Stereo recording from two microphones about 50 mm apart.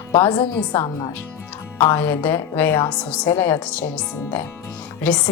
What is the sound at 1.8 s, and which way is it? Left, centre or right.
Speech, left.